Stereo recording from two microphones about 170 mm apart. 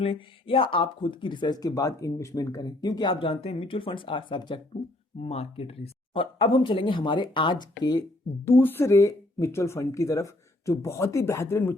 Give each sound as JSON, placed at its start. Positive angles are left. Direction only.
{"t": 0.0, "sound": "speech", "side_deg": 35}
{"t": 8.4, "sound": "speech", "side_deg": 15}